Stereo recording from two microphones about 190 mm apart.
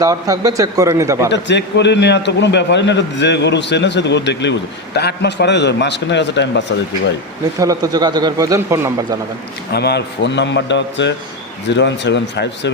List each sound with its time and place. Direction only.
0.0 s a man's voice: 20° right (ahead or behind)
1.3 s a man's voice: 65° left (ahead or behind)
7.6 s speech: 20° right (ahead or behind)
9.7 s a man's voice: 60° left (ahead or behind)